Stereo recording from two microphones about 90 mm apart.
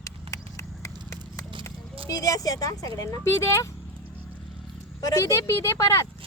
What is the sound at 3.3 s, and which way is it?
Speech, 30° left (ahead or behind).